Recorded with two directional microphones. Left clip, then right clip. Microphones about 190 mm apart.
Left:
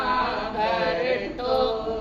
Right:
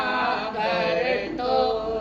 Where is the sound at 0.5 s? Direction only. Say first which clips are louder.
Left 2 dB; 20° right (ahead or behind).